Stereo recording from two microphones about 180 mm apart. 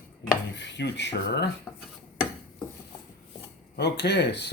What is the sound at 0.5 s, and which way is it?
Speech, 80° left.